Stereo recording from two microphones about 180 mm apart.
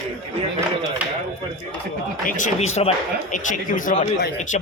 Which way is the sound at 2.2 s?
45° left (ahead or behind).